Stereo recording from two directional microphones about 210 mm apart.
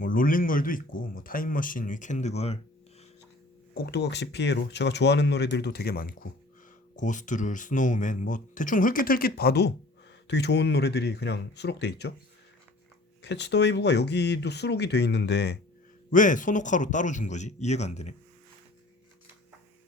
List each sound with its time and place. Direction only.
0.0 s speech: 40° left (ahead or behind)
3.8 s speech: 50° left (ahead or behind)
13.2 s speech: 55° left (ahead or behind)
16.1 s speech: 40° left (ahead or behind)